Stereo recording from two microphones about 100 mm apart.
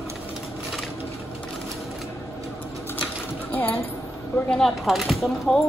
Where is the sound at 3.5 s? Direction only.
20° left (ahead or behind).